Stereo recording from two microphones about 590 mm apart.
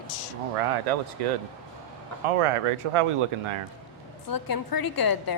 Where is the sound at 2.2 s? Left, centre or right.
Right.